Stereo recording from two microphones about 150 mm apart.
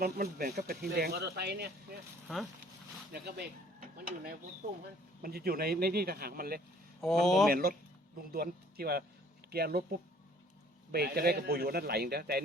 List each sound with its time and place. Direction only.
0.0 s speech: 90° right
2.2 s speech: centre (ahead or behind)
3.1 s speech: 90° right
7.0 s speech: centre (ahead or behind)
7.5 s speech: 75° right (ahead or behind)
8.3 s speech: 90° right
10.9 s speech: 90° right